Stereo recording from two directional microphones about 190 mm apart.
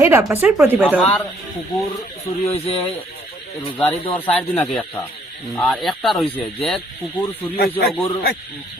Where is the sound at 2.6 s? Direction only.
30° left (ahead or behind).